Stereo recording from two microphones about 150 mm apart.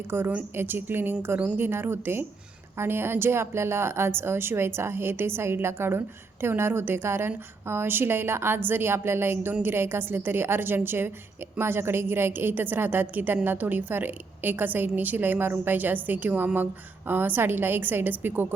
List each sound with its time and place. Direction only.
0.1 s speech: 10° right (ahead or behind)